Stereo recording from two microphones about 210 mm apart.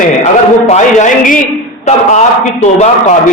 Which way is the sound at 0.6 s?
35° left (ahead or behind).